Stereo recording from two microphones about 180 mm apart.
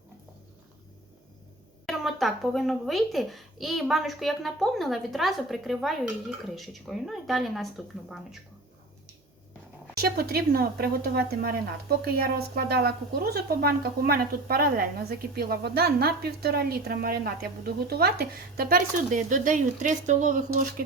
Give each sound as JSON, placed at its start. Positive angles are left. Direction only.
{"t": 1.9, "sound": "a child's voice", "side_deg": 0}
{"t": 10.0, "sound": "a woman's voice", "side_deg": -60}